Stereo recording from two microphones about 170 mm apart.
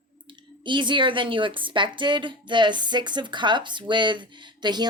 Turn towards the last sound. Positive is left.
turn(degrees=-25)  # may be behind; listen again after turning